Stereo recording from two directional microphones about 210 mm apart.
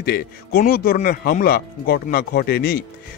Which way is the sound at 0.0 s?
45° left (ahead or behind).